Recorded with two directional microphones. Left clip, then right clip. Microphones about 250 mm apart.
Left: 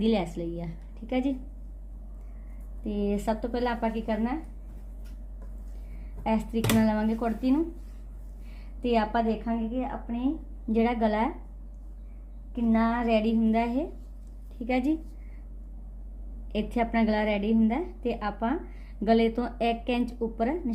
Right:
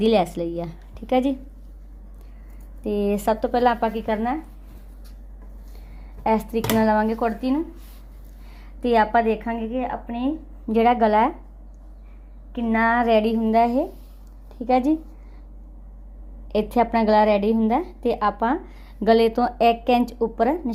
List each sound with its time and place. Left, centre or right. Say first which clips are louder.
0.0 s a woman's voice: right 9 dB; right
2.8 s a woman's voice: right 8 dB; right
6.2 s a woman's voice: right 7 dB; right
8.8 s a woman's voice: right 8 dB; right
10.7 s a woman's voice: right 9 dB; right
12.5 s a woman's voice: right 7 dB; right
16.5 s a woman's voice: right 9 dB; right